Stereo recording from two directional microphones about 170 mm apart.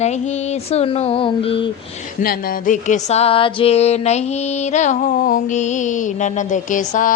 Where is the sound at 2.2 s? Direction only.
60° left (ahead or behind).